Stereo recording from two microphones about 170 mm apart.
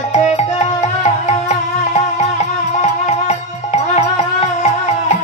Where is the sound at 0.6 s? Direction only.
40° left (ahead or behind).